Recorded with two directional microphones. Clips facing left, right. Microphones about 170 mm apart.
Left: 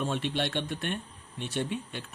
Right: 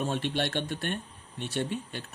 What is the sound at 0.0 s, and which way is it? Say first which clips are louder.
Speech: right 1 dB; 40° right (ahead or behind).